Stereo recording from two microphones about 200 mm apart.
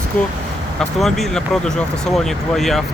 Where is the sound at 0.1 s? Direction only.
10° left (ahead or behind).